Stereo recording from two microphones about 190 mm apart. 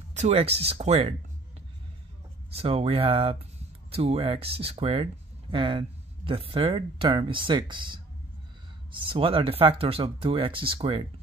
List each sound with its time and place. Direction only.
0.1 s speech: 35° right (ahead or behind)
2.5 s speech: 30° right (ahead or behind)
9.0 s speech: 25° right (ahead or behind)